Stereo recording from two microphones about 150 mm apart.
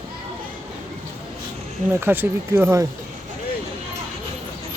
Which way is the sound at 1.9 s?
15° right (ahead or behind).